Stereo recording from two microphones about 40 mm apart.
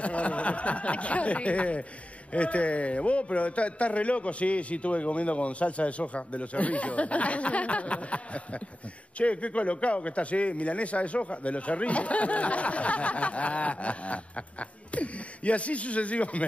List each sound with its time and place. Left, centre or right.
0.0 s a man's voice: left